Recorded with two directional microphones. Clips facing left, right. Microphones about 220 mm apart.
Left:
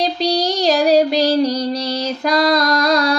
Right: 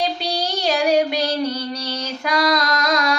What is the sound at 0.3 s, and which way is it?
Child singing, 35° left (ahead or behind).